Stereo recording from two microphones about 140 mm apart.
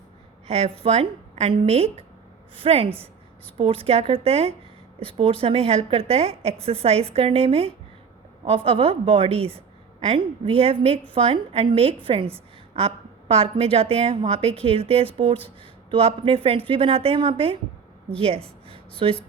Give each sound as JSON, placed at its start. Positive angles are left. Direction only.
{"t": 0.4, "sound": "a woman's voice", "side_deg": -45}